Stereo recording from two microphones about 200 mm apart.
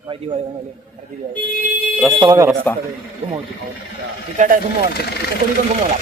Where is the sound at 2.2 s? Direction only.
15° right (ahead or behind).